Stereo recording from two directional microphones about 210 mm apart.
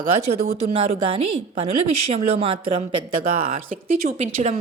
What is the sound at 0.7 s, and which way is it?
A woman's voice, 25° right (ahead or behind).